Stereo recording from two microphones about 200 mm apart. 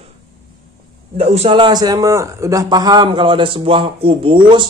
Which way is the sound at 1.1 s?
30° right (ahead or behind).